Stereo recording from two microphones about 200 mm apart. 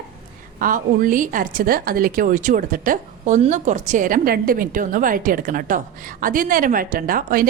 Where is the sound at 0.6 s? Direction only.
40° right (ahead or behind).